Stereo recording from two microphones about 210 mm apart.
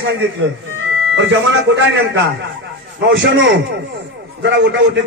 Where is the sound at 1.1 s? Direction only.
60° right (ahead or behind).